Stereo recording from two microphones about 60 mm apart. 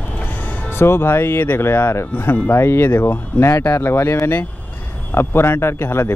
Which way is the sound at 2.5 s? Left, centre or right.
Left.